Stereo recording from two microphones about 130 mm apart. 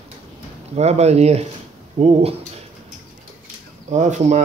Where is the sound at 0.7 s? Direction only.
55° right (ahead or behind).